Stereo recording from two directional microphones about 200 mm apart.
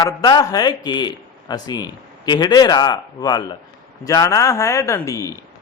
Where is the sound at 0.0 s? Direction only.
20° left (ahead or behind).